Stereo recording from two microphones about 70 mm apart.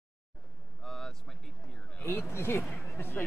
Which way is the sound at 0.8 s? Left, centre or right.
Centre.